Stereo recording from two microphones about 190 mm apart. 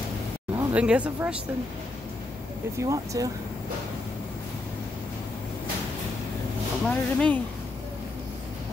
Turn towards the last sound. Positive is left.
turn(degrees=5)  # may be behind; listen again after turning